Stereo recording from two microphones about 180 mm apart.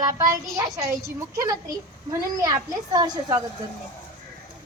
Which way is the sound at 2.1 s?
20° right (ahead or behind).